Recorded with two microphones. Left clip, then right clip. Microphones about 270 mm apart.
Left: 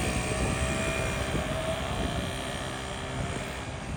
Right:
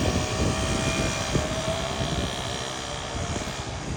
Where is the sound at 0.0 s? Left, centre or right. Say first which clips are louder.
Right 4 dB; centre.